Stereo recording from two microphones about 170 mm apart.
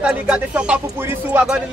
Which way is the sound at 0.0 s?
5° right (ahead or behind).